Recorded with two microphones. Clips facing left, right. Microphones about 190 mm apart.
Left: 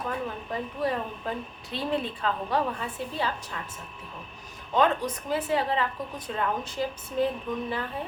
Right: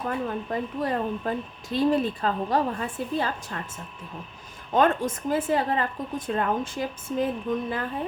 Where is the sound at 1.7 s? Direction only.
40° right (ahead or behind).